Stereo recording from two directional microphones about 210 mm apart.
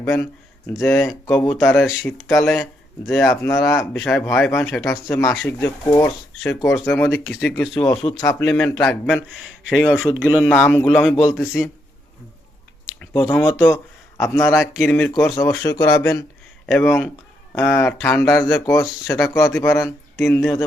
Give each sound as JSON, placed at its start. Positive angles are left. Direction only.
{"t": 0.0, "sound": "speech", "side_deg": 10}
{"t": 3.2, "sound": "speech", "side_deg": 15}
{"t": 3.6, "sound": "speech", "side_deg": 0}
{"t": 7.3, "sound": "speech", "side_deg": -5}
{"t": 8.2, "sound": "speech", "side_deg": 10}
{"t": 10.2, "sound": "speech", "side_deg": -10}
{"t": 10.4, "sound": "speech", "side_deg": 5}
{"t": 12.8, "sound": "chewing", "side_deg": -5}
{"t": 13.1, "sound": "a man's voice", "side_deg": 10}